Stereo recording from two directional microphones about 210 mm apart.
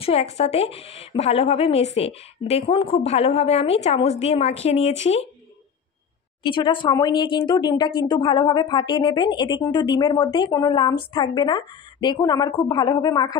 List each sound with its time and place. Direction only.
0.0 s speech: 30° left (ahead or behind)
6.4 s speech: 25° left (ahead or behind)